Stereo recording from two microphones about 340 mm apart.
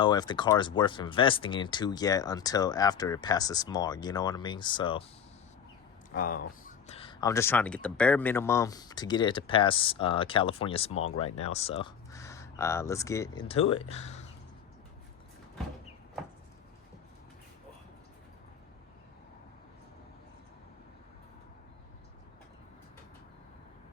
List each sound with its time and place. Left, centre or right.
0.0 s speech: centre
6.1 s speech: left